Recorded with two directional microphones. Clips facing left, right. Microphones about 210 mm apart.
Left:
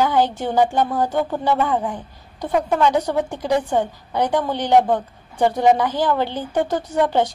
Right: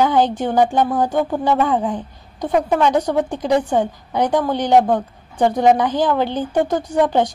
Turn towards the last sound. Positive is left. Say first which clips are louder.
# right 2 dB
turn(degrees=-15)  # may be behind; listen again after turning